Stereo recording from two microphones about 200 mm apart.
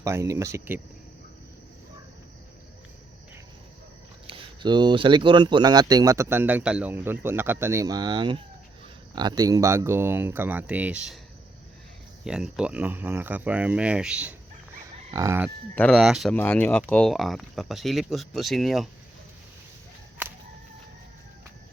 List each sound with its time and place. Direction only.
0.0 s speech: 15° right (ahead or behind)
4.3 s speech: 20° right (ahead or behind); by 11.2 s 5° right (ahead or behind)
12.2 s speech: 5° right (ahead or behind)
15.7 s speech: 5° left (ahead or behind)